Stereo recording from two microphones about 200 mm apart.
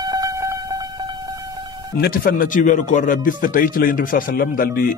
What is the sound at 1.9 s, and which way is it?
Speech, 50° left (ahead or behind).